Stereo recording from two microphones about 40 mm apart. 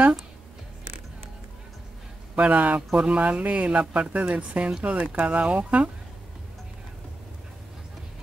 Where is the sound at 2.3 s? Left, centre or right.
Right.